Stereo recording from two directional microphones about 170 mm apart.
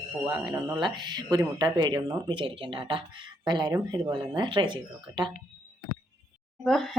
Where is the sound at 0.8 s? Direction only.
25° right (ahead or behind).